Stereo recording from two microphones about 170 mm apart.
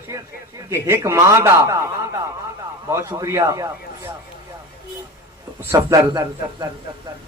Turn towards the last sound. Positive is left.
turn(degrees=-20)  # may be behind; listen again after turning